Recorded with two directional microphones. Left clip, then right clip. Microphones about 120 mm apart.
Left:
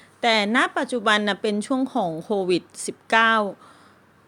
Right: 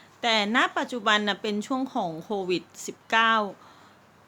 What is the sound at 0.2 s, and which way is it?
A woman's voice, 45° left (ahead or behind).